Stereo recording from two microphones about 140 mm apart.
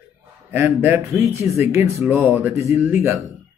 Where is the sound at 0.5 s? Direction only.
15° right (ahead or behind).